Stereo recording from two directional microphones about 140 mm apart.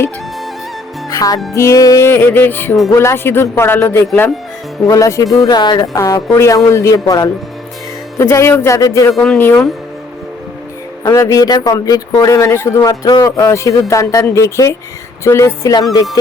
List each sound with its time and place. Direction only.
1.1 s music: 25° left (ahead or behind)
1.5 s speech: 20° left (ahead or behind)
9.1 s speech: centre (ahead or behind)
11.1 s speech: 20° left (ahead or behind)